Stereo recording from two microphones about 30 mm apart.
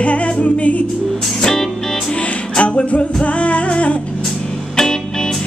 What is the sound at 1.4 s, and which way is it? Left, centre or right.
Music, centre.